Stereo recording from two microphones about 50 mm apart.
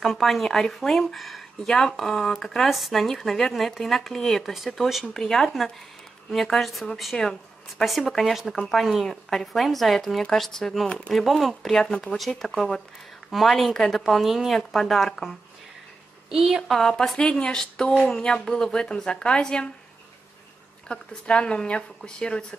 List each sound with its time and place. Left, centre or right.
0.0 s speech: centre
16.3 s a woman's voice: centre
16.7 s speech: centre
17.2 s speech: centre
20.9 s speech: centre